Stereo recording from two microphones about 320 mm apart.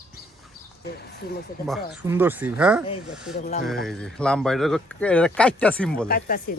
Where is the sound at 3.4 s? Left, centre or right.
Left.